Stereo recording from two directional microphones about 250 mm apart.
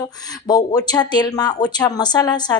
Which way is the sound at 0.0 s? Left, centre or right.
Centre.